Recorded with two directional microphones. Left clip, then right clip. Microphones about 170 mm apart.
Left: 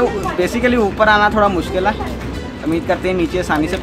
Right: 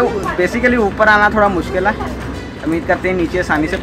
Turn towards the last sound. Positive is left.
turn(degrees=0)  # may be behind; listen again after turning